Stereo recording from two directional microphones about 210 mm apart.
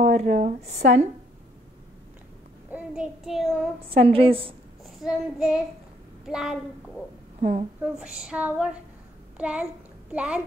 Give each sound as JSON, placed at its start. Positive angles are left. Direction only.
{"t": 0.0, "sound": "speech", "side_deg": -30}
{"t": 2.7, "sound": "child singing", "side_deg": -5}
{"t": 3.9, "sound": "a woman's voice", "side_deg": -25}
{"t": 5.0, "sound": "a woman's voice", "side_deg": -5}
{"t": 7.3, "sound": "a woman's voice", "side_deg": -30}
{"t": 7.8, "sound": "speech", "side_deg": -5}